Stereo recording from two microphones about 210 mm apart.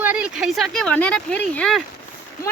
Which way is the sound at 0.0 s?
5° right (ahead or behind).